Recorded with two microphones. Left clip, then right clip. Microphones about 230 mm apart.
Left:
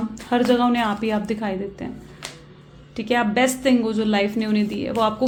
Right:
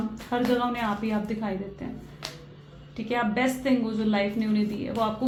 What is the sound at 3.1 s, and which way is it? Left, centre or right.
A woman's voice, left.